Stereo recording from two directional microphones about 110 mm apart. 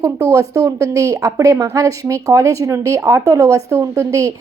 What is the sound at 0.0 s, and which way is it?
Speech, 30° right (ahead or behind).